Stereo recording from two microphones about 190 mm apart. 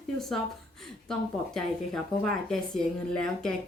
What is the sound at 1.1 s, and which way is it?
A woman's voice, 5° left (ahead or behind).